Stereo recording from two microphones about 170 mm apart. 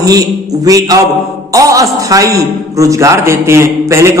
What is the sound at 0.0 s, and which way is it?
A man's voice, 20° right (ahead or behind).